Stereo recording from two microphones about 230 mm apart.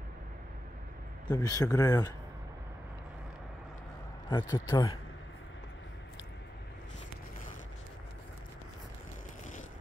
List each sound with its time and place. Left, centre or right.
1.3 s speech: centre
4.3 s speech: centre